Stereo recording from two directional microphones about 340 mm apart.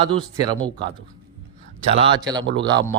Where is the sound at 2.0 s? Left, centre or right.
Centre.